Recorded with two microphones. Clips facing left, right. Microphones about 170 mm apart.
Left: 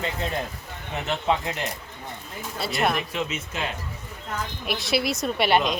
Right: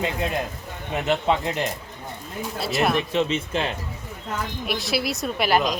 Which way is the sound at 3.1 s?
30° right (ahead or behind).